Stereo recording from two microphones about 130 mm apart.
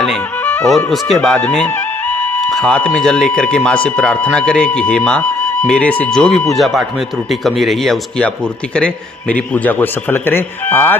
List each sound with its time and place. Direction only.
1.1 s speech: 5° left (ahead or behind)
1.5 s music: 10° left (ahead or behind)
2.5 s speech: 5° left (ahead or behind)
9.3 s speech: 10° left (ahead or behind)